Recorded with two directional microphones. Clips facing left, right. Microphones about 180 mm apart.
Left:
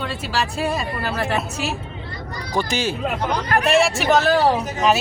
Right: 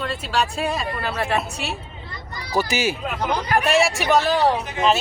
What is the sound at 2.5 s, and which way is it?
Speech, 10° right (ahead or behind).